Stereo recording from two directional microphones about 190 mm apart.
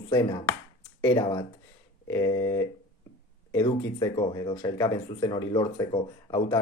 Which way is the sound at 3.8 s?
20° left (ahead or behind).